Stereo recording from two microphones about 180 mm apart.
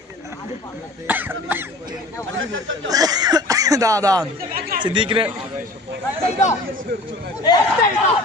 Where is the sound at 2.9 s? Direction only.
20° right (ahead or behind).